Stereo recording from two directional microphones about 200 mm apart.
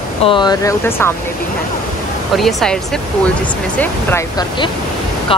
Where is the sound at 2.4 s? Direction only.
Centre (ahead or behind).